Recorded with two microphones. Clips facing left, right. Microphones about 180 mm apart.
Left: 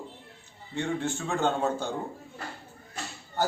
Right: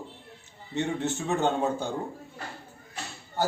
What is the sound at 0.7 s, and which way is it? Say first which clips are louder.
A man's voice: right 1 dB; 20° right (ahead or behind).